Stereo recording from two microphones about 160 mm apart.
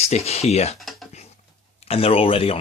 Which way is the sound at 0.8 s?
Centre (ahead or behind).